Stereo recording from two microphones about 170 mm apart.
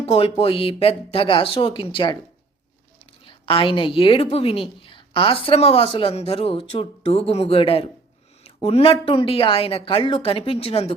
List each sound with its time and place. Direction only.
0.0 s a woman's voice: 35° left (ahead or behind)
3.2 s a woman's voice: 30° left (ahead or behind)